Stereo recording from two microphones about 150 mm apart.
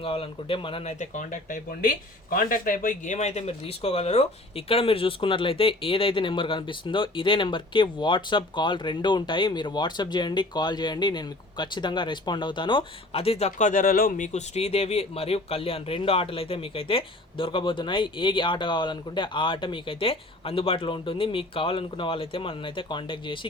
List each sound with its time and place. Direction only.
0.0 s speech: 40° left (ahead or behind)
0.9 s speech: 55° left (ahead or behind); by 14.3 s 75° left (ahead or behind)
14.3 s speech: 45° left (ahead or behind)